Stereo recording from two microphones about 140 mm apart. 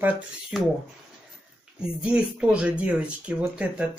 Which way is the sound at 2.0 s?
5° right (ahead or behind).